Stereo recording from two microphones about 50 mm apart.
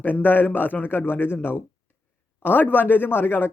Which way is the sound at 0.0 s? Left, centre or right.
Left.